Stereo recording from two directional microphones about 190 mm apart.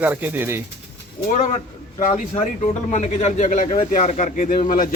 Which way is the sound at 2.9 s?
40° left (ahead or behind).